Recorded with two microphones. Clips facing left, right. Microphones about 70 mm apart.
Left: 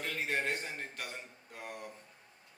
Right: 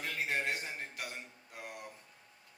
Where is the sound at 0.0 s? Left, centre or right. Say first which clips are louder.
Left 1 dB; centre.